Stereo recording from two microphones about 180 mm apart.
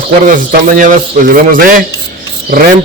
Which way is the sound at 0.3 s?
50° right (ahead or behind).